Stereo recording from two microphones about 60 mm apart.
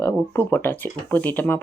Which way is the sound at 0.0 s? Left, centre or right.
Left.